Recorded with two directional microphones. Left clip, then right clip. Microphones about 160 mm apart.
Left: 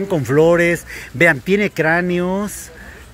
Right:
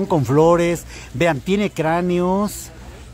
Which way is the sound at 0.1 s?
5° right (ahead or behind).